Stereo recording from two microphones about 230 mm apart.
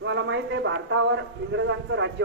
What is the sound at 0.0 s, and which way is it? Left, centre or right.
A man's voice, right.